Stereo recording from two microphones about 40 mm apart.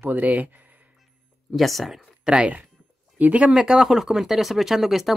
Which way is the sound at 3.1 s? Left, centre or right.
Right.